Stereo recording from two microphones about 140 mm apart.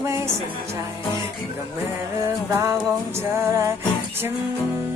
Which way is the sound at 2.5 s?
20° right (ahead or behind).